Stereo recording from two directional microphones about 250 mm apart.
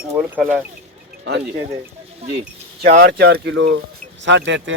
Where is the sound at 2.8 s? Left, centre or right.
Right.